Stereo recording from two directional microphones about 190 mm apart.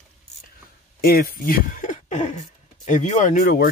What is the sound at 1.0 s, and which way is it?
Speech, 50° left (ahead or behind).